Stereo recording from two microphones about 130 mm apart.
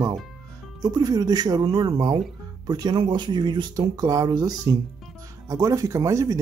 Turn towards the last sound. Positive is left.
turn(degrees=-25)  # may be behind; listen again after turning